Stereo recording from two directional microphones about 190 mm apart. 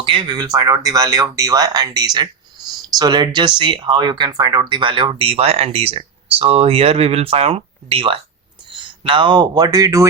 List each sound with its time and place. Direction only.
0.0 s speech: 25° right (ahead or behind)